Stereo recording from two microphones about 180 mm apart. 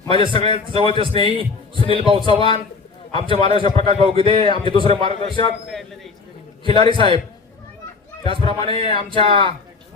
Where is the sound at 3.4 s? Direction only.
25° left (ahead or behind).